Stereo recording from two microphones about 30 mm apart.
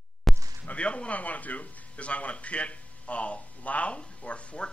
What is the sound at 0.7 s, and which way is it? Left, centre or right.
Speech, left.